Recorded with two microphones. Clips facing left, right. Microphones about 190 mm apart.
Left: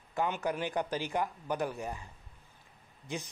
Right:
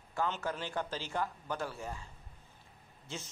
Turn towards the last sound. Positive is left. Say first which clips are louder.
# left 5 dB
turn(degrees=15)  # may be behind; listen again after turning